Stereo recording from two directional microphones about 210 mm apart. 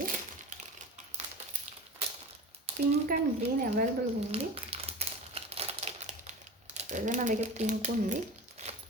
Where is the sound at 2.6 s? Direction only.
30° right (ahead or behind).